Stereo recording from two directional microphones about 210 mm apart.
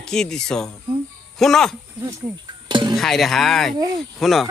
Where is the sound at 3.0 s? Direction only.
Centre (ahead or behind).